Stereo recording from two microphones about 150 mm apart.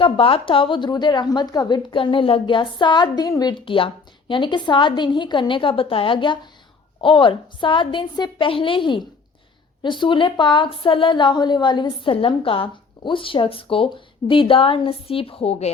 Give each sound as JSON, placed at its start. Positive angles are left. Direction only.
{"t": 0.0, "sound": "a woman's voice", "side_deg": 40}